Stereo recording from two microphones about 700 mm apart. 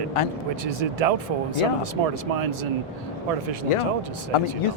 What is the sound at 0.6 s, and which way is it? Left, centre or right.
Speech, right.